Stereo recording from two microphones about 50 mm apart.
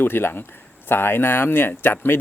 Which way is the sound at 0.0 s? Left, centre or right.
Left.